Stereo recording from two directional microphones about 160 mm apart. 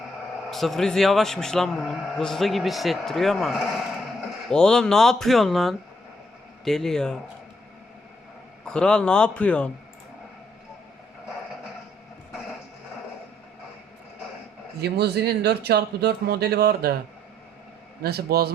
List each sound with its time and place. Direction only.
0.5 s a man's voice: centre (ahead or behind)
8.6 s a man's voice: 5° left (ahead or behind)
14.8 s speech: 90° right
18.0 s speech: 80° right